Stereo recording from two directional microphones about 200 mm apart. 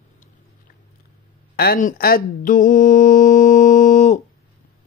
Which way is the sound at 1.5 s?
45° left (ahead or behind).